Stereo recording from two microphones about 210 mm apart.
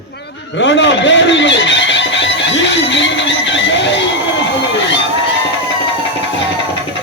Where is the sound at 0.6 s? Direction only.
60° left (ahead or behind).